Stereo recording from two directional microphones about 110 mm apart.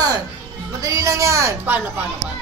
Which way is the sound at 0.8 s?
30° right (ahead or behind).